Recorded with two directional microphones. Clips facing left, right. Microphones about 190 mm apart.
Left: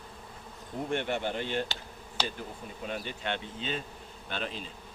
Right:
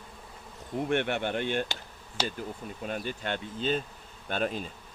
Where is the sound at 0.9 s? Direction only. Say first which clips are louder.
Right 2 dB; 65° right (ahead or behind).